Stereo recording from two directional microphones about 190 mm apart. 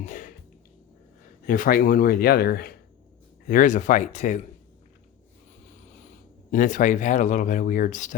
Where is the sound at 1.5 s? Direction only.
50° left (ahead or behind).